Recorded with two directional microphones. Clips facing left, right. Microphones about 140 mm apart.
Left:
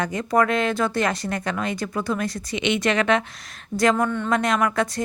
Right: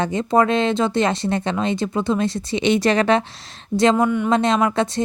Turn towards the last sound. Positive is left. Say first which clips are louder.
# right 3 dB
turn(degrees=-25)  # may be behind; listen again after turning